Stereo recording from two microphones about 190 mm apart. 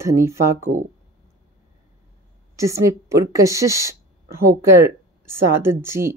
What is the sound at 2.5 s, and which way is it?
A woman's voice, 15° right (ahead or behind).